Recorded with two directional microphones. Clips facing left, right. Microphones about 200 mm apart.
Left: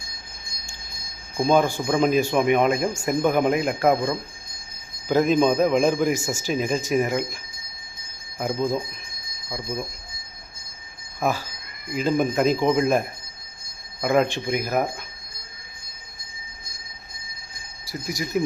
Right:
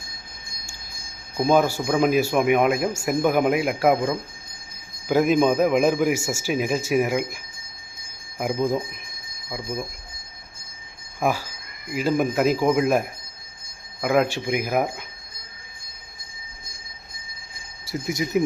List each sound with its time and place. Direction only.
1.4 s speech: 5° right (ahead or behind)
11.2 s speech: 10° right (ahead or behind)
17.8 s speech: 20° right (ahead or behind)